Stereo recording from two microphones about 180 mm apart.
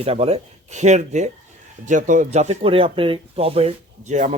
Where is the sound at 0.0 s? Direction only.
35° right (ahead or behind).